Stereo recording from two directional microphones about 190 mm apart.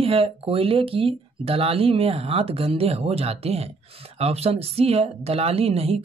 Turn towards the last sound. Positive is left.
turn(degrees=-30)  # may be behind; listen again after turning